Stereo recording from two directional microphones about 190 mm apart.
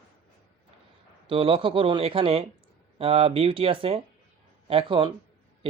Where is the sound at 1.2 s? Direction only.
30° right (ahead or behind).